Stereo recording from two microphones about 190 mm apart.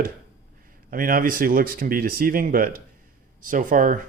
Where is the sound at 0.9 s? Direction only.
45° right (ahead or behind).